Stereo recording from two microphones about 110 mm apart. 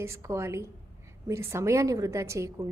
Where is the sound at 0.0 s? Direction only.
25° right (ahead or behind).